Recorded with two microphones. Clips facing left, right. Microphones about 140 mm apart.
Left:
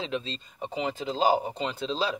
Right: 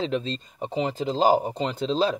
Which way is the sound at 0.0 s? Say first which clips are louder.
Right 6 dB; 40° right (ahead or behind).